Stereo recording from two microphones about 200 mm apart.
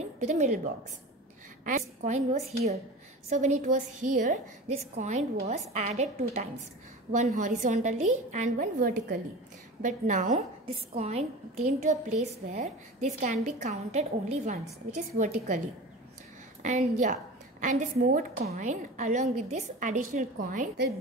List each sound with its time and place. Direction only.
0.0 s a woman's voice: 35° right (ahead or behind)
1.6 s a woman's voice: 40° right (ahead or behind)
16.6 s a woman's voice: 35° right (ahead or behind)